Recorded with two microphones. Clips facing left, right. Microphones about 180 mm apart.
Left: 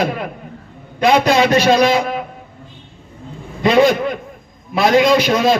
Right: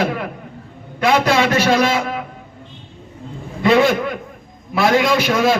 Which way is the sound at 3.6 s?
20° left (ahead or behind).